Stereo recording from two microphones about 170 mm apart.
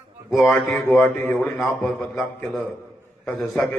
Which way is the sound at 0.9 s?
5° left (ahead or behind).